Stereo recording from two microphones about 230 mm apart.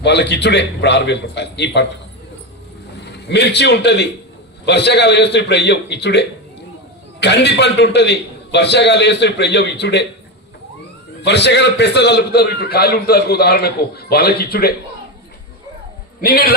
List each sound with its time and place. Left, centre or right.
0.0 s a man's voice: left
3.2 s a man's voice: left
11.2 s a man's voice: left
16.2 s heart sounds: left